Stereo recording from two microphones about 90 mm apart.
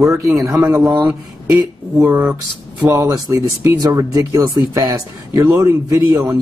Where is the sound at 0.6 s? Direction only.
20° right (ahead or behind).